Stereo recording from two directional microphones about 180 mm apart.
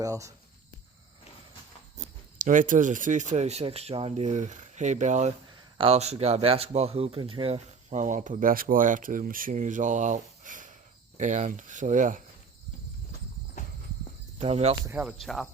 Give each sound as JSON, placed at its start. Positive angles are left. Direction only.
{"t": 0.0, "sound": "speech", "side_deg": -20}
{"t": 2.0, "sound": "speech", "side_deg": -45}
{"t": 14.4, "sound": "cricket", "side_deg": -35}
{"t": 14.8, "sound": "speech", "side_deg": -10}
{"t": 15.2, "sound": "cricket", "side_deg": 0}